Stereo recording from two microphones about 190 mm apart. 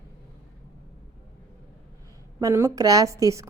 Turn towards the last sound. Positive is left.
turn(degrees=-15)  # may be behind; listen again after turning